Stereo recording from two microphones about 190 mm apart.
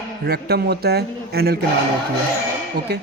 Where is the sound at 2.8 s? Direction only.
55° right (ahead or behind).